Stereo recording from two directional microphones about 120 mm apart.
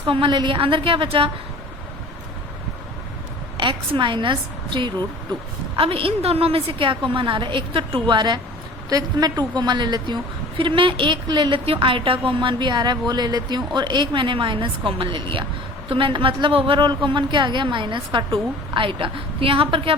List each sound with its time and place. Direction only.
0.0 s a woman's voice: 45° right (ahead or behind)
3.6 s a woman's voice: 40° right (ahead or behind)
5.7 s a woman's voice: 50° right (ahead or behind)